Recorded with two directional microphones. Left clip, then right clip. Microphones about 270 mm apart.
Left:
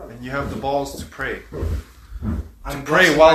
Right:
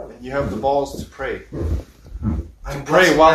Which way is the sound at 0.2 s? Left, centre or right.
Left.